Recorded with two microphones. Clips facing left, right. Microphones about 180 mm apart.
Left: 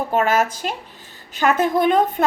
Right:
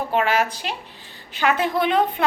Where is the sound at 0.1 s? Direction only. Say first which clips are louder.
Left 2 dB; 45° left (ahead or behind).